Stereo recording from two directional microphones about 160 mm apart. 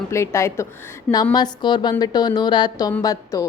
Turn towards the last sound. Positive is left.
turn(degrees=20)  # may be behind; listen again after turning